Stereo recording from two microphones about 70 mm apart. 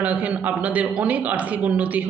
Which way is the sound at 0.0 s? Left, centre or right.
Right.